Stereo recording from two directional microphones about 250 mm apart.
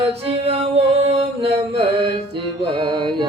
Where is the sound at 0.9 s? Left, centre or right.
Right.